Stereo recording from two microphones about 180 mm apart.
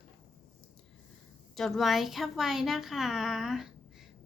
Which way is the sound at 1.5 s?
Centre (ahead or behind).